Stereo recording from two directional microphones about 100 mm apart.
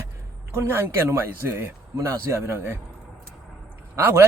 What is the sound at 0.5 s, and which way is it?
Speech, 25° right (ahead or behind).